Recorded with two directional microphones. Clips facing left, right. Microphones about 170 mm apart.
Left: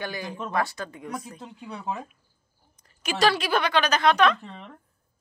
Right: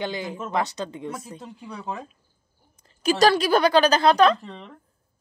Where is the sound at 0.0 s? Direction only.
20° right (ahead or behind).